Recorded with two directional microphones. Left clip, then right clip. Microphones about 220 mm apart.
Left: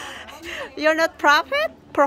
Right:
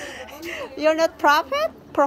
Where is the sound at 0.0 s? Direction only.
10° left (ahead or behind).